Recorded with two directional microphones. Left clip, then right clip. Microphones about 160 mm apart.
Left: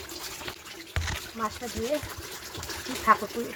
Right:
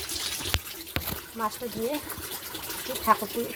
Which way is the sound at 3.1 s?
15° left (ahead or behind).